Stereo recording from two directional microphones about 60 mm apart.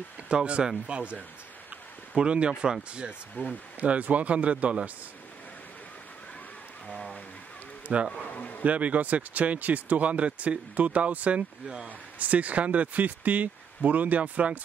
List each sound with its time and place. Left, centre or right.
0.3 s speech: centre
3.4 s speech: left
3.8 s speech: right
7.9 s speech: right
8.3 s bee: left
8.6 s speech: right
11.6 s speech: centre
12.2 s speech: right